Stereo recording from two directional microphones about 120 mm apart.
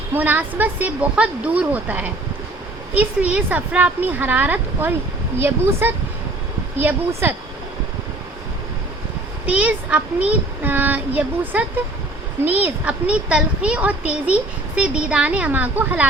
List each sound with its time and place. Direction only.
0.1 s a child's voice: 15° right (ahead or behind)
9.5 s a child's voice: 10° right (ahead or behind)